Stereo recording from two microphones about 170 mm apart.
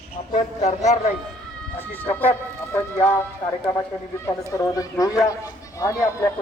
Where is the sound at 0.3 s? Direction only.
45° left (ahead or behind).